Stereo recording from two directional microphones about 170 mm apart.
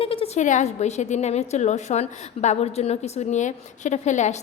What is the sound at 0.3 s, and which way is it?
A woman's voice, 45° left (ahead or behind).